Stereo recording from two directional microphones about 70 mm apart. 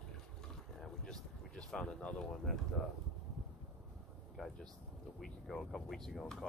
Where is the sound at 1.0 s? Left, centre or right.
Centre.